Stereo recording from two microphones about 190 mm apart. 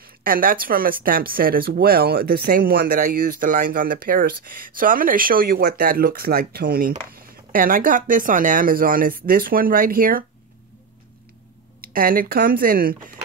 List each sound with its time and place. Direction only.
0.0 s speech: 50° right (ahead or behind)
11.8 s speech: 50° right (ahead or behind)